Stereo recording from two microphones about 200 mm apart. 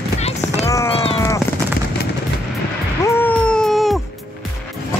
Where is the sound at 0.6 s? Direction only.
15° left (ahead or behind).